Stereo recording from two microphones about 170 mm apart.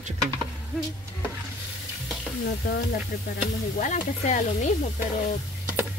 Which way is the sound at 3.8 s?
50° left (ahead or behind).